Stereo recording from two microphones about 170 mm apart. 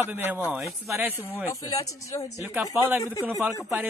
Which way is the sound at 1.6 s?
20° left (ahead or behind).